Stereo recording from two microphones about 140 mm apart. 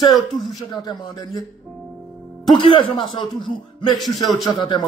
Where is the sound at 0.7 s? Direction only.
30° left (ahead or behind).